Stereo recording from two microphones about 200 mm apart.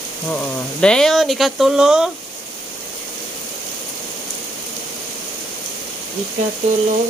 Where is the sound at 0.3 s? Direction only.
5° left (ahead or behind).